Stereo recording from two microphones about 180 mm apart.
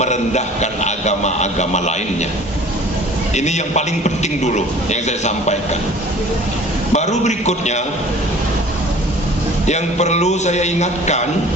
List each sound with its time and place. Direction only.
0.0 s a man's voice: 40° left (ahead or behind)
3.3 s a man's voice: 40° left (ahead or behind)
6.9 s a man's voice: 40° left (ahead or behind)
9.6 s a man's voice: 40° left (ahead or behind)